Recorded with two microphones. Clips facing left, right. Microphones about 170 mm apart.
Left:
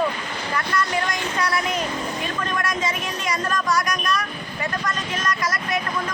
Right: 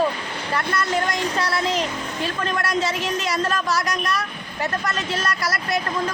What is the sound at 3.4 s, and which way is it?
Speech, 30° right (ahead or behind).